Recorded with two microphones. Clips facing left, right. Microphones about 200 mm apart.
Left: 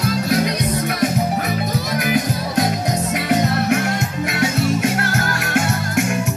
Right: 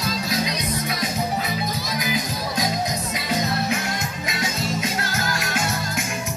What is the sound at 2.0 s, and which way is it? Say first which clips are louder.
Music: left 7 dB; 60° left (ahead or behind).